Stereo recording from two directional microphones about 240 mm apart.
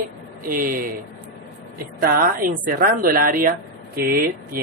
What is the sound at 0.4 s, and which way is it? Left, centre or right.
Speech, right.